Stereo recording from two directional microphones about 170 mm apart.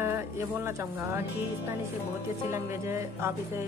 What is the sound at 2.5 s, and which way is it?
Speech, 15° right (ahead or behind).